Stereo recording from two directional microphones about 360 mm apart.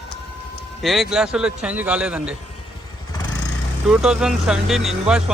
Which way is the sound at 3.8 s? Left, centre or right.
Centre.